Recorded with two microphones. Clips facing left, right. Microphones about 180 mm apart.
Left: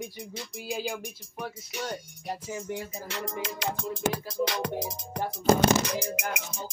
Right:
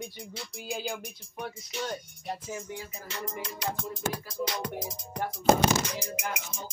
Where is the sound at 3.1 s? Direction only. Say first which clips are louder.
Left 2 dB; 80° left.